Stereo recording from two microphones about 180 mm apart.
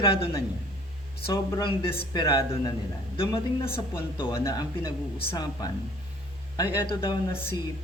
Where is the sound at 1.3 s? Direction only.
25° left (ahead or behind).